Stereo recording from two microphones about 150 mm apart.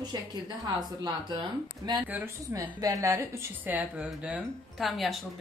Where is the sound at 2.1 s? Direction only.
20° right (ahead or behind).